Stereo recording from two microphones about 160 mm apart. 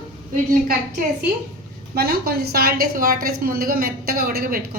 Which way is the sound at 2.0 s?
75° right (ahead or behind).